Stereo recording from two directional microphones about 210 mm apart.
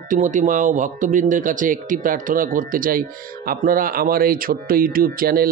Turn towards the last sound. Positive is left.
turn(degrees=-45)  # may be behind; listen again after turning